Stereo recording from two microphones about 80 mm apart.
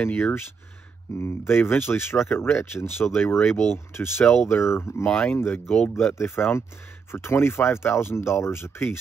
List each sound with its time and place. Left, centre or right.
0.0 s speech: left